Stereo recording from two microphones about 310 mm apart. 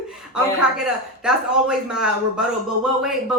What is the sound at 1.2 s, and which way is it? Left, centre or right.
Speech, centre.